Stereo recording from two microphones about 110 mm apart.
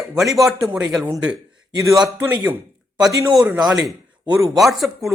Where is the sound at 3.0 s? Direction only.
35° right (ahead or behind).